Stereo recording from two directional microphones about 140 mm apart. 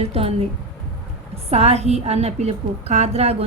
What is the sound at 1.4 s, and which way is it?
A woman's voice, 45° right (ahead or behind).